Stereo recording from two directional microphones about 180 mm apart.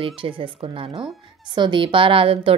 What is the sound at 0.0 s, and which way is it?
A woman's voice, 30° right (ahead or behind).